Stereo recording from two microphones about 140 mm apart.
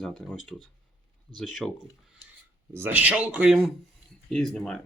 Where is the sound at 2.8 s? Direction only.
10° right (ahead or behind); by 4.8 s 5° left (ahead or behind).